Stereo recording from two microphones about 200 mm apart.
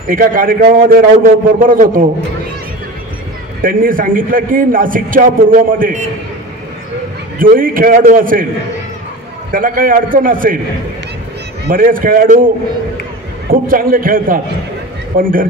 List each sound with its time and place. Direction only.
0.1 s a man's voice: 45° right (ahead or behind)
3.6 s a man's voice: 45° right (ahead or behind)
7.3 s a man's voice: 45° right (ahead or behind)
9.5 s a man's voice: 45° right (ahead or behind)
11.6 s a man's voice: 45° right (ahead or behind)
13.5 s a man's voice: 45° right (ahead or behind)